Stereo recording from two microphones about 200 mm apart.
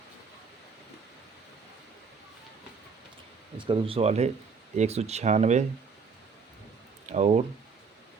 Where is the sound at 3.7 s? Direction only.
30° right (ahead or behind).